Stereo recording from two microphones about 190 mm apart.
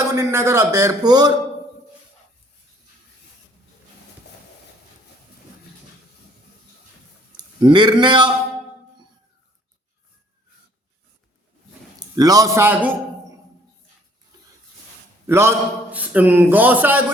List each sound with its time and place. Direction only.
0.0 s a man's voice: 15° right (ahead or behind)
7.6 s a man's voice: 20° right (ahead or behind)
11.9 s a man's voice: 20° right (ahead or behind)
15.3 s a man's voice: 15° right (ahead or behind)